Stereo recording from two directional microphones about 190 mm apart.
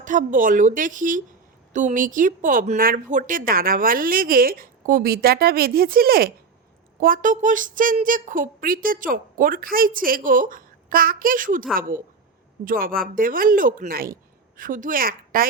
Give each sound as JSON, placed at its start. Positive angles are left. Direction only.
{"t": 0.0, "sound": "a woman's voice", "side_deg": -40}